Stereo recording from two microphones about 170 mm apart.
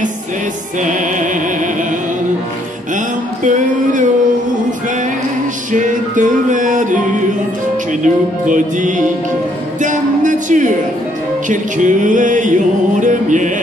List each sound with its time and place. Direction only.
3.4 s music: 50° right (ahead or behind)
5.7 s music: 50° right (ahead or behind)
8.0 s music: 50° right (ahead or behind)